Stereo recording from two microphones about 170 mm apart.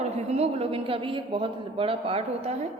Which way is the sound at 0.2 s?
40° right (ahead or behind).